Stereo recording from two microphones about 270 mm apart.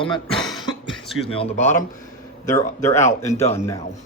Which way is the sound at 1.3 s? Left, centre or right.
Left.